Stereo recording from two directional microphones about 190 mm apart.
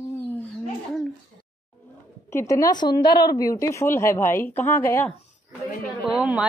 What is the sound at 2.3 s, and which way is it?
Speech, 15° left (ahead or behind).